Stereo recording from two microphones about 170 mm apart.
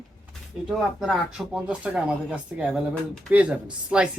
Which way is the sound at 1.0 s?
5° right (ahead or behind).